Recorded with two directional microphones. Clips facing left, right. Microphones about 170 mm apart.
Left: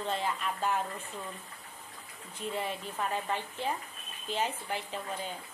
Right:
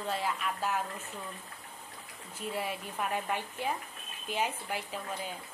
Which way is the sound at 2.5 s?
10° right (ahead or behind).